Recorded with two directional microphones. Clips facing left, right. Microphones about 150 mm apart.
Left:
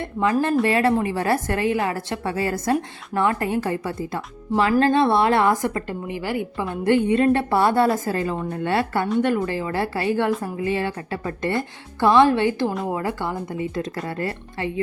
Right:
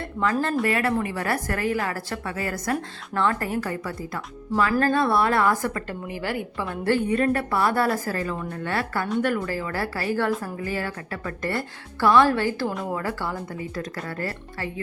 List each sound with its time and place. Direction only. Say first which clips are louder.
0.0 s speech: left 4 dB; 20° left (ahead or behind)
2.7 s speech: left 4 dB; 15° left (ahead or behind)